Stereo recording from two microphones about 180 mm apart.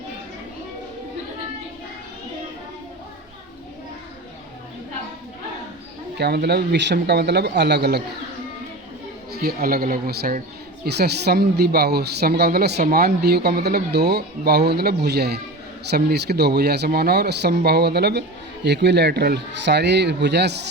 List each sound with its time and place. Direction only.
6.1 s speech: 65° right (ahead or behind)
9.3 s speech: 55° right (ahead or behind)